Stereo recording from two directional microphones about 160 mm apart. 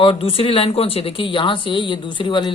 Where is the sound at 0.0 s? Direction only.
35° left (ahead or behind).